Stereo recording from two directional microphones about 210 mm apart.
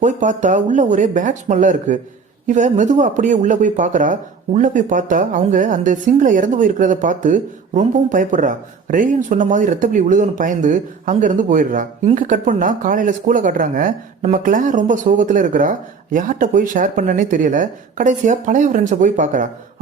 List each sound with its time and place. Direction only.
0.0 s speech: 35° right (ahead or behind)